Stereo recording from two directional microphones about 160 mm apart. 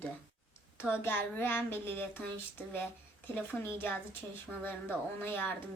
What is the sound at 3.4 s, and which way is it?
Speech, 10° left (ahead or behind).